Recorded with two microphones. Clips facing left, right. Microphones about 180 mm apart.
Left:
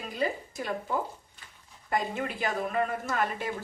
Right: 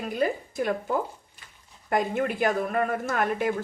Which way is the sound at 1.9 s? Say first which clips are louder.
Right 5 dB; 55° right (ahead or behind).